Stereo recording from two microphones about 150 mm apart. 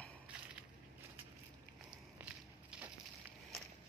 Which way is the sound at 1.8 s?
5° right (ahead or behind).